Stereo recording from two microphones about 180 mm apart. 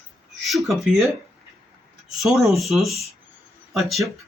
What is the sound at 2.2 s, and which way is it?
Speech, centre (ahead or behind).